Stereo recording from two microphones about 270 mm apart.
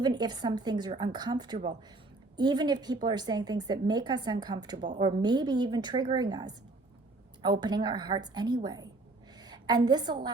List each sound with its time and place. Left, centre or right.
0.0 s a woman's voice: centre